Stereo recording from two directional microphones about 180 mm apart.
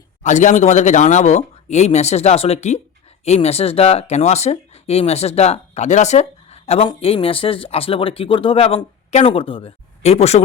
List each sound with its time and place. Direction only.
0.2 s speech: 40° left (ahead or behind)